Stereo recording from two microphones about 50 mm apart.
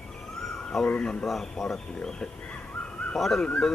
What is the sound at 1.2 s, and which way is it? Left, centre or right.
Speech, centre.